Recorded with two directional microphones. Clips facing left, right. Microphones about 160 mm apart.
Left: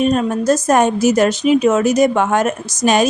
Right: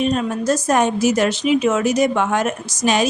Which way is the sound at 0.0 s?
45° left (ahead or behind).